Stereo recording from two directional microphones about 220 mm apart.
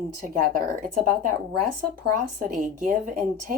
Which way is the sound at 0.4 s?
40° right (ahead or behind).